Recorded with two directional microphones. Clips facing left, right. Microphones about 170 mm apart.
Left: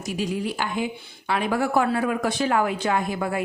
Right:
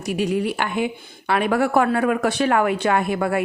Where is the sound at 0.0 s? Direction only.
65° right (ahead or behind).